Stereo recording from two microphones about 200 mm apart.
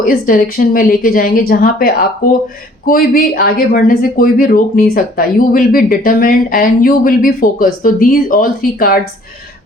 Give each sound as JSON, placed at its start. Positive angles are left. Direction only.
{"t": 0.0, "sound": "speech", "side_deg": 45}